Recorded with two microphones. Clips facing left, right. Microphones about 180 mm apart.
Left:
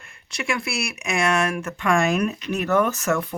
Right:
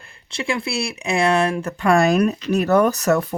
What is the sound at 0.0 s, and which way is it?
Speech, 30° right (ahead or behind).